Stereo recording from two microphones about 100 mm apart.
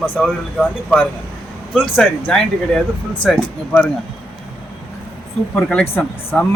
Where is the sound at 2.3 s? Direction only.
5° left (ahead or behind).